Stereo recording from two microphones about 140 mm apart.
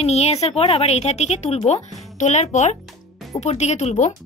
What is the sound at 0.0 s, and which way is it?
A child's voice, 50° left (ahead or behind).